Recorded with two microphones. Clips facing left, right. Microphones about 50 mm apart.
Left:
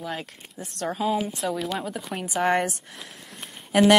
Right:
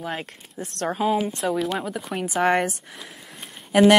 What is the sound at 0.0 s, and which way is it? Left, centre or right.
Speech, right.